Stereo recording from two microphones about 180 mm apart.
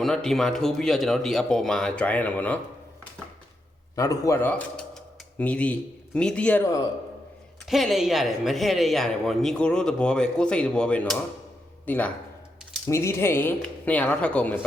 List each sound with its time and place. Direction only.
0.0 s speech: centre (ahead or behind)
3.9 s speech: 20° left (ahead or behind)
7.6 s speech: centre (ahead or behind)